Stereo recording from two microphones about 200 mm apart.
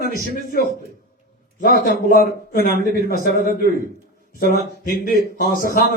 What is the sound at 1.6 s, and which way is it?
Speech, 45° left (ahead or behind).